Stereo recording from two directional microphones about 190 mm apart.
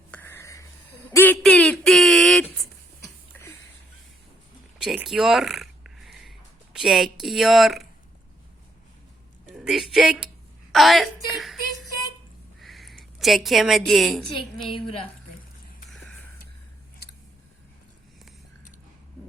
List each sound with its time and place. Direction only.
0.1 s whispering: 10° left (ahead or behind)
1.1 s a sound: 10° left (ahead or behind)
4.8 s a sound: centre (ahead or behind)
6.7 s speech: centre (ahead or behind)
9.5 s a woman's voice: centre (ahead or behind)
12.5 s a sound: centre (ahead or behind)
13.1 s speech: centre (ahead or behind)
14.7 s a woman's voice: 30° left (ahead or behind)
15.9 s music: 5° left (ahead or behind)